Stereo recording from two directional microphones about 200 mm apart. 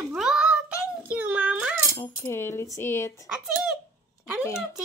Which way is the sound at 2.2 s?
10° left (ahead or behind).